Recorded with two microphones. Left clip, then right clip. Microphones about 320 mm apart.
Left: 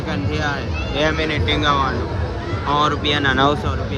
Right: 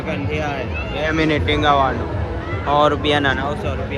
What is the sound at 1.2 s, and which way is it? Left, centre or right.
Speech, centre.